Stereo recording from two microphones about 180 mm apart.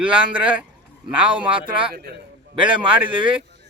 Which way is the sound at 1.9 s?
60° right (ahead or behind).